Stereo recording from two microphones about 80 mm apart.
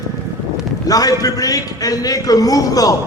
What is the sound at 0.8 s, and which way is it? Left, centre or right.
A man's voice, left.